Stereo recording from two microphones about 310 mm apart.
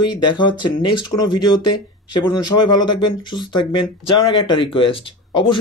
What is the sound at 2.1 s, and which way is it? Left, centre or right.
Speech, centre.